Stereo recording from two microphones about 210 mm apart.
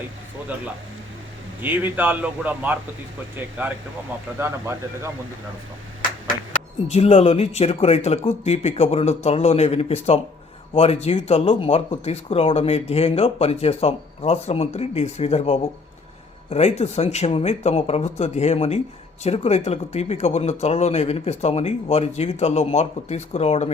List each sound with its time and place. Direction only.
1.6 s a man's voice: 10° right (ahead or behind)
6.0 s a sound: 40° left (ahead or behind)
6.9 s speech: 30° left (ahead or behind)